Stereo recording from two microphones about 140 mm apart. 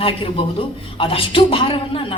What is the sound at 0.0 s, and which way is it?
A man's voice, 40° left (ahead or behind).